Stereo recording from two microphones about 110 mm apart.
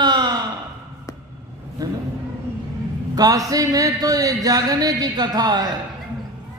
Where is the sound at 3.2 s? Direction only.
35° right (ahead or behind).